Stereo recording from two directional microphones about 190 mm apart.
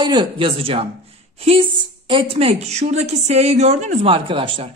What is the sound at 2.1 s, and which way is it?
A woman's voice, 30° right (ahead or behind).